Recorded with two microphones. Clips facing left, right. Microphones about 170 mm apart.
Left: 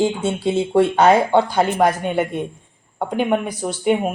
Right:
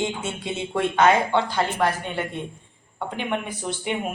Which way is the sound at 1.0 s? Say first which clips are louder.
Left 2 dB; 40° left (ahead or behind).